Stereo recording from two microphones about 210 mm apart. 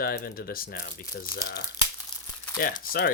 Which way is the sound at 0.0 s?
45° left (ahead or behind).